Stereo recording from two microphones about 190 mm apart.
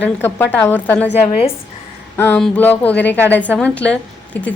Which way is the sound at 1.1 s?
30° left (ahead or behind).